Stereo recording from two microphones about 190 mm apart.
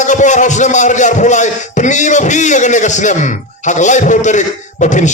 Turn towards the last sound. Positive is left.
turn(degrees=40)  # may be behind; listen again after turning